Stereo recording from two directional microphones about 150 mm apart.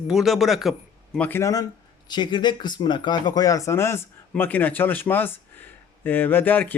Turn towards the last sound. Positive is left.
turn(degrees=10)  # may be behind; listen again after turning